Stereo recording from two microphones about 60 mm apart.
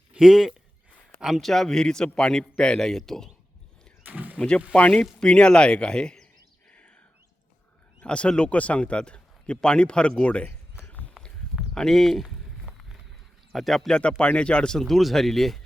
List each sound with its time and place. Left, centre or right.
0.1 s speech: centre
1.4 s speech: centre
4.0 s a sound: right
4.4 s speech: centre
6.7 s whispering: centre
8.0 s speech: centre
10.8 s walk: left
11.7 s speech: centre
13.5 s a man's voice: centre
14.0 s speech: centre